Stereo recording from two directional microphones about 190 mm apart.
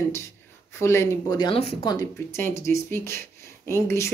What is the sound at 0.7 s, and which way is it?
Speech, 15° left (ahead or behind).